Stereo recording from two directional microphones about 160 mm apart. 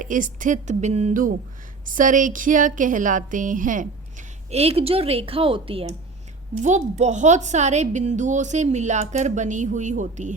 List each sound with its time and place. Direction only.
0.0 s a woman's voice: 55° right (ahead or behind)
4.5 s a woman's voice: 40° right (ahead or behind)
6.6 s a woman's voice: 45° right (ahead or behind)